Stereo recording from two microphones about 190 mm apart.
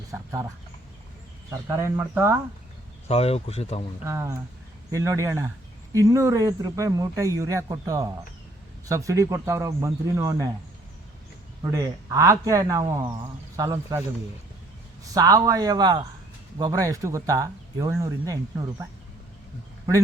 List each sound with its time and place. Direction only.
0.1 s a man's voice: 15° right (ahead or behind)
1.5 s a man's voice: 15° right (ahead or behind)
3.1 s speech: 30° left (ahead or behind)
4.0 s a man's voice: 15° right (ahead or behind)
11.6 s a man's voice: 15° right (ahead or behind)
15.1 s a man's voice: 20° right (ahead or behind)